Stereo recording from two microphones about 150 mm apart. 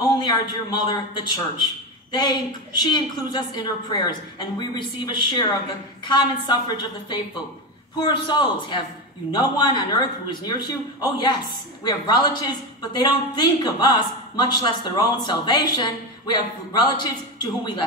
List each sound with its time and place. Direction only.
0.1 s a woman's voice: 30° left (ahead or behind)
8.0 s speech: 30° left (ahead or behind)